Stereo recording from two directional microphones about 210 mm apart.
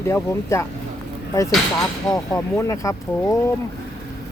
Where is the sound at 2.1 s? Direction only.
15° left (ahead or behind).